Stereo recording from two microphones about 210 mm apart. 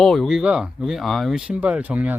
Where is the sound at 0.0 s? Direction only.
Centre (ahead or behind).